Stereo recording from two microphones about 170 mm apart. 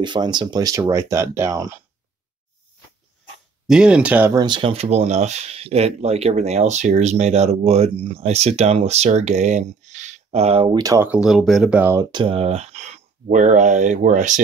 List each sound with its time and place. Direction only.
0.0 s speech: 25° right (ahead or behind)
3.6 s speech: 5° right (ahead or behind)
4.3 s speech: 25° right (ahead or behind)
11.1 s speech: 5° right (ahead or behind)
11.8 s speech: 15° right (ahead or behind)
12.1 s speech: 30° right (ahead or behind); by 14.4 s 45° right (ahead or behind)